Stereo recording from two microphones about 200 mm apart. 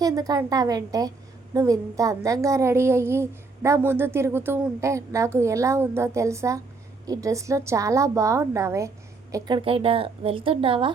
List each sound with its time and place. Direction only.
0.0 s a woman's voice: 20° right (ahead or behind)